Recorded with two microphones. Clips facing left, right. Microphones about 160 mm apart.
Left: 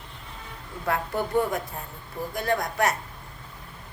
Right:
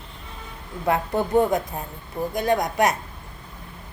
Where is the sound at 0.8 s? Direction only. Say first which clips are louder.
Right 5 dB; 20° right (ahead or behind).